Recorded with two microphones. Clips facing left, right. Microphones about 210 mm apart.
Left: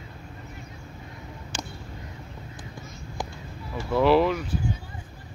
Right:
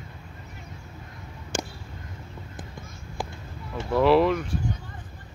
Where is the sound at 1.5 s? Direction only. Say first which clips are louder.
Right 6 dB; 50° right (ahead or behind).